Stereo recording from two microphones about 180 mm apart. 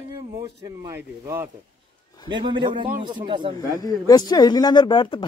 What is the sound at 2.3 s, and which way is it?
A man's voice, 25° right (ahead or behind).